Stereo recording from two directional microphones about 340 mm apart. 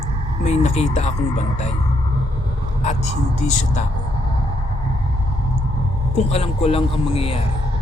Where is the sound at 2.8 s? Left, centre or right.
Centre.